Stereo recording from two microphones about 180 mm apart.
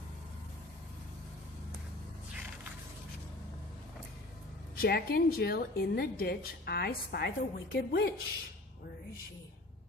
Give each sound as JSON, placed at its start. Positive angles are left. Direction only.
{"t": 4.7, "sound": "a woman's voice", "side_deg": 60}